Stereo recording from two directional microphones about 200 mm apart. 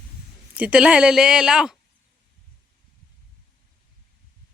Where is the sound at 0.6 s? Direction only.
5° right (ahead or behind).